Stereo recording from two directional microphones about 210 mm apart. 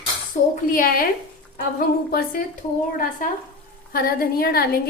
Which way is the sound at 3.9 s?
45° left (ahead or behind).